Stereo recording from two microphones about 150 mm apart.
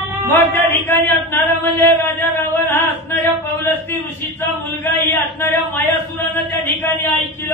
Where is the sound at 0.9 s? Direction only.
10° left (ahead or behind).